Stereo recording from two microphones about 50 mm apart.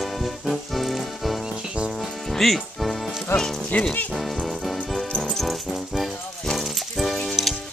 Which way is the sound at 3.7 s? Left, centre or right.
Left.